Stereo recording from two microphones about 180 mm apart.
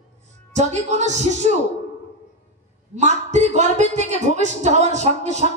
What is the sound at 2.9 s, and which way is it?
A woman's voice, 40° right (ahead or behind).